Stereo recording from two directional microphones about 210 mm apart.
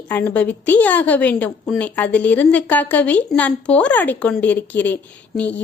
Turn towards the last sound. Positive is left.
turn(degrees=5)  # may be behind; listen again after turning